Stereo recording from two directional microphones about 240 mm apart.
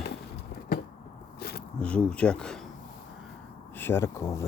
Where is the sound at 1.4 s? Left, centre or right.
Left.